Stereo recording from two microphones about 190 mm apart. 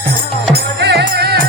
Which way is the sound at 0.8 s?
60° right (ahead or behind).